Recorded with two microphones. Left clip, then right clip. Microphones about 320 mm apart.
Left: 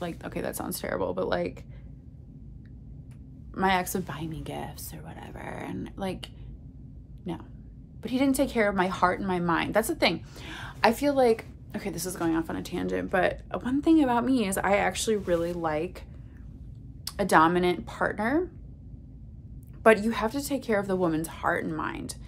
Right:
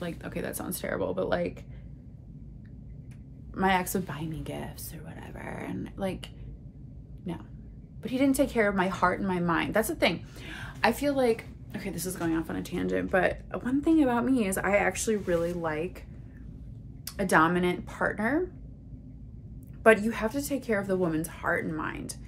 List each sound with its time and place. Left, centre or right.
0.0 s a woman's voice: centre
3.5 s a woman's voice: centre
17.0 s a woman's voice: centre
19.8 s a woman's voice: centre